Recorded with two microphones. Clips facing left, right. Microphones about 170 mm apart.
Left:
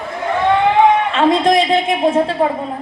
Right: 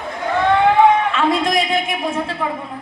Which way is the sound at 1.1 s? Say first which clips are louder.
Left 5 dB; 30° left (ahead or behind).